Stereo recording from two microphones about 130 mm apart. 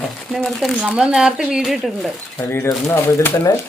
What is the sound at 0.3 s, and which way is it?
Speech, 5° left (ahead or behind).